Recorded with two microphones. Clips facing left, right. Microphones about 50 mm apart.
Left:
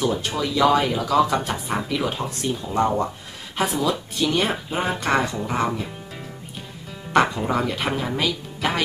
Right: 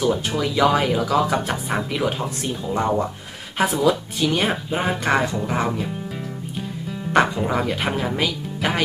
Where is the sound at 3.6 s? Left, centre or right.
Right.